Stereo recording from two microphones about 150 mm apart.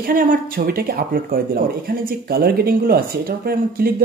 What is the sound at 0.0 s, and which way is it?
Speech, 65° right (ahead or behind).